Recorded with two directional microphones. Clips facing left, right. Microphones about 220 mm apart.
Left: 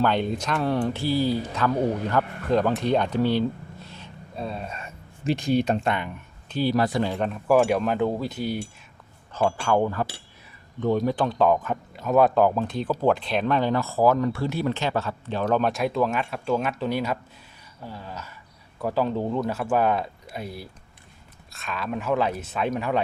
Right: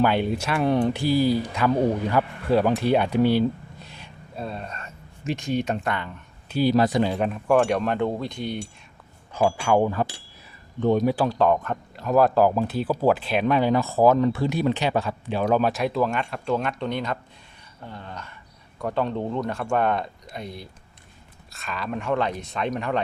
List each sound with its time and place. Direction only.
0.0 s speech: 10° right (ahead or behind)
3.8 s vehicle: 15° right (ahead or behind)
4.4 s speech: centre (ahead or behind)
5.2 s speech: 35° left (ahead or behind)
6.5 s speech: 15° right (ahead or behind); by 8.6 s 5° left (ahead or behind)
9.3 s speech: 10° right (ahead or behind)
11.3 s speech: centre (ahead or behind)